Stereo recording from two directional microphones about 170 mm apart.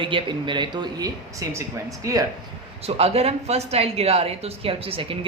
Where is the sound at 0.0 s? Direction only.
30° right (ahead or behind).